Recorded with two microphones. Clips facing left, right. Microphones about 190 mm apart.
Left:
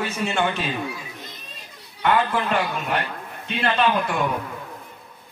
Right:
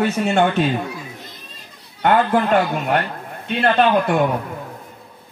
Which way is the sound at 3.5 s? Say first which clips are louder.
Right 6 dB; 60° right (ahead or behind).